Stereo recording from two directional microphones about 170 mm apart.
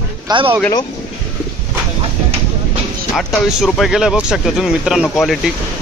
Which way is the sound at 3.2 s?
Centre (ahead or behind).